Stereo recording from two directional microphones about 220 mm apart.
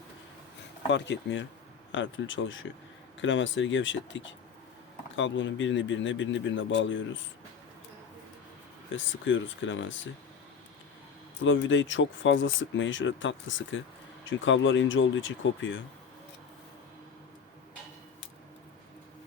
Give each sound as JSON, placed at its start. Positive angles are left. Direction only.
{"t": 0.9, "sound": "speech", "side_deg": 55}
{"t": 9.2, "sound": "speech", "side_deg": 60}
{"t": 11.4, "sound": "speech", "side_deg": 60}